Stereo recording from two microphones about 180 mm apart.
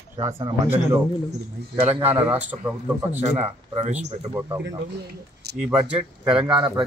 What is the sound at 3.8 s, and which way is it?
Speech, 40° right (ahead or behind).